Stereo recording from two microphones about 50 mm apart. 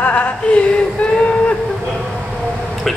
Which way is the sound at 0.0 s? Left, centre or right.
Left.